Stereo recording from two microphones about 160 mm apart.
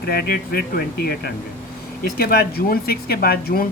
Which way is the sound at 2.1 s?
70° left (ahead or behind).